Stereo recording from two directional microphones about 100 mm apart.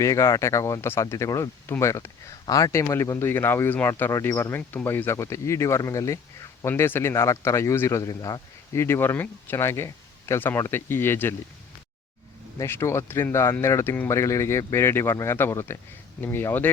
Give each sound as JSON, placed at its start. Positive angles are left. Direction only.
{"t": 0.0, "sound": "speech", "side_deg": 30}
{"t": 2.8, "sound": "speech", "side_deg": 30}
{"t": 12.5, "sound": "speech", "side_deg": 25}